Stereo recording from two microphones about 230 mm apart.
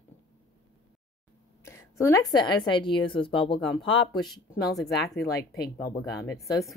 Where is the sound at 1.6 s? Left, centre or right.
Centre.